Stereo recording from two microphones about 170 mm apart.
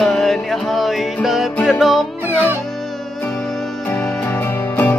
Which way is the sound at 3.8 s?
5° left (ahead or behind).